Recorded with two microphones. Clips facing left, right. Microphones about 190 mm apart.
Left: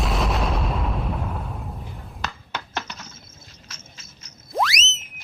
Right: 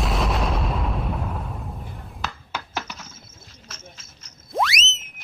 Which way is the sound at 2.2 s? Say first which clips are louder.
Even; 5° right (ahead or behind).